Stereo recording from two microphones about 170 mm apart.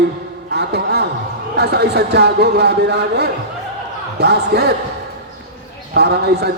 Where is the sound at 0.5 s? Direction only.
75° right (ahead or behind).